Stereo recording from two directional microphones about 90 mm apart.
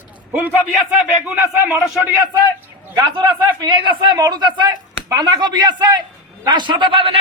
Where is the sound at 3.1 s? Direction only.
60° right (ahead or behind).